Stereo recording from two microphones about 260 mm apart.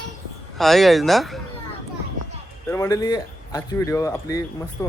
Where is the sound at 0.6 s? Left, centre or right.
Centre.